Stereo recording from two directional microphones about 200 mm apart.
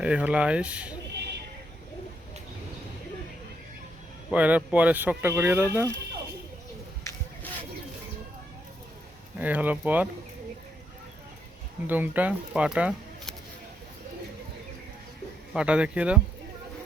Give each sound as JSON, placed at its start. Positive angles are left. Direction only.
{"t": 0.0, "sound": "speech", "side_deg": -5}
{"t": 1.1, "sound": "a sound", "side_deg": -55}
{"t": 4.3, "sound": "speech", "side_deg": -5}
{"t": 7.0, "sound": "rub", "side_deg": 15}
{"t": 9.4, "sound": "speech", "side_deg": -10}
{"t": 11.9, "sound": "speech", "side_deg": -10}
{"t": 15.5, "sound": "speech", "side_deg": -5}